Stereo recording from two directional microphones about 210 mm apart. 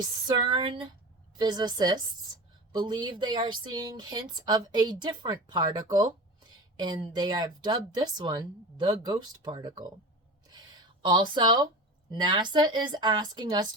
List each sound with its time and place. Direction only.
0.0 s speech: 20° right (ahead or behind)
10.5 s a sound: 20° right (ahead or behind)
12.1 s speech: 20° right (ahead or behind)